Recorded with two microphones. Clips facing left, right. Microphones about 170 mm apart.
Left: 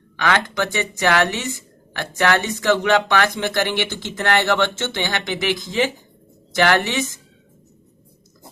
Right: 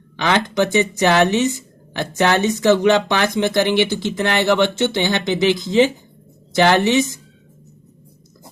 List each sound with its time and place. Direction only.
0.2 s speech: 20° right (ahead or behind)